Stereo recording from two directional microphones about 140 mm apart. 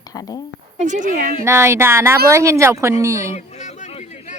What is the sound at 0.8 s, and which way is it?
Speech, 60° right (ahead or behind).